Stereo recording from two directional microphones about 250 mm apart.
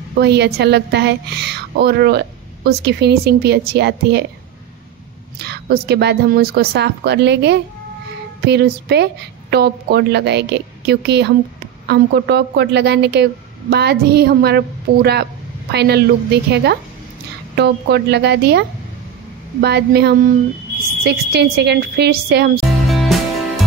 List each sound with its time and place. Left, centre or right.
0.2 s a woman's voice: right
5.4 s a woman's voice: right
22.7 s music: centre